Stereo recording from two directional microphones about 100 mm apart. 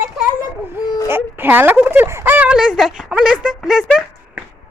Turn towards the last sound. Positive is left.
turn(degrees=0)  # may be behind; listen again after turning